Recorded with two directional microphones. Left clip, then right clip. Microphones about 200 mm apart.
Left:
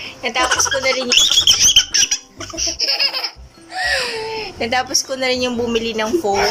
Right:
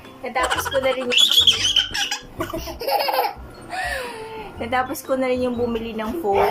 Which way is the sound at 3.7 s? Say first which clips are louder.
Left 6 dB; 30° left (ahead or behind).